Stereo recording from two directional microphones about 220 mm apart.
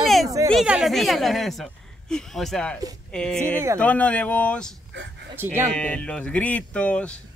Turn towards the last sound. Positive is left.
turn(degrees=5)  # may be behind; listen again after turning